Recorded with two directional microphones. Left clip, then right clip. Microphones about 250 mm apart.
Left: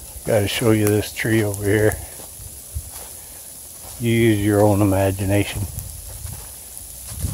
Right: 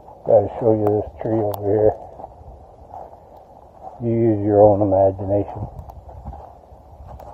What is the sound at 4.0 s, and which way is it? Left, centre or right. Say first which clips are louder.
Speech: left 1 dB; left.